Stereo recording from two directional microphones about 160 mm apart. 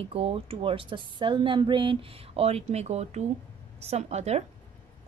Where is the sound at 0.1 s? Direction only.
35° right (ahead or behind).